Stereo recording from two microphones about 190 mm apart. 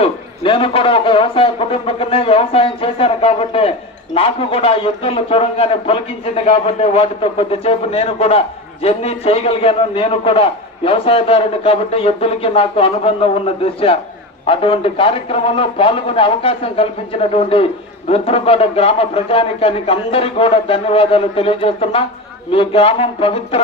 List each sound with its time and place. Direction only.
0.0 s a man's voice: 30° left (ahead or behind)